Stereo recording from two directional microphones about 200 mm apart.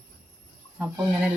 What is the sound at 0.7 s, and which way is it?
Speech, 5° right (ahead or behind).